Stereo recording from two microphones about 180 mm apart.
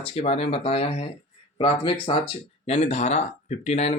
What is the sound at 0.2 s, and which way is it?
Speech, 35° left (ahead or behind).